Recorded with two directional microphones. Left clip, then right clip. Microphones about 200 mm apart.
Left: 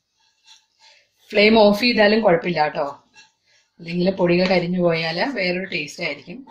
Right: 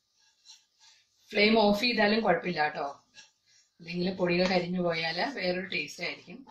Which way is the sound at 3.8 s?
40° left (ahead or behind).